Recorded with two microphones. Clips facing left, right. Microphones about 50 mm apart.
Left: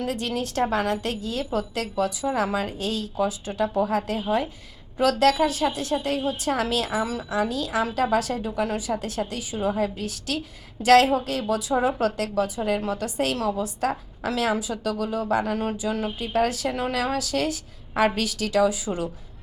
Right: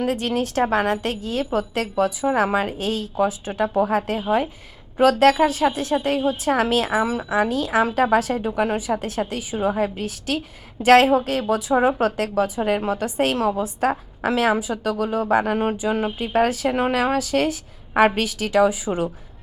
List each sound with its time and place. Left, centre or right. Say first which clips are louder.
0.0 s a woman's voice: right 5 dB; right